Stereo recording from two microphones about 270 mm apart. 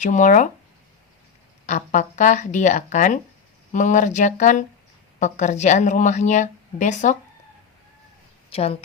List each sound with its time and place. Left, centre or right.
0.0 s a woman's voice: left
1.6 s a woman's voice: left
8.4 s a woman's voice: left